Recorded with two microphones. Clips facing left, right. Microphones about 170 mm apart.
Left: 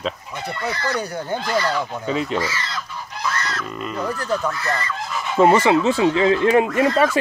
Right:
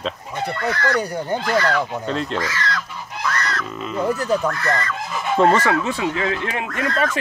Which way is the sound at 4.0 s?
20° right (ahead or behind).